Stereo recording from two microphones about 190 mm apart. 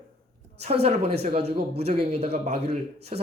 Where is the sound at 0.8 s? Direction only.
30° right (ahead or behind).